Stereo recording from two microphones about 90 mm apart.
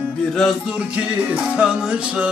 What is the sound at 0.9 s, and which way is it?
Music, 15° right (ahead or behind).